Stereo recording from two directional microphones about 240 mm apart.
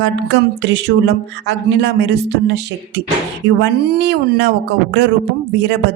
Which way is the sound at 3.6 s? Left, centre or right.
Right.